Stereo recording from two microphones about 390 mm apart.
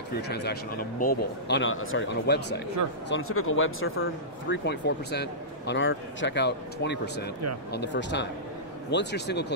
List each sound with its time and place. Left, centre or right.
0.1 s speech: left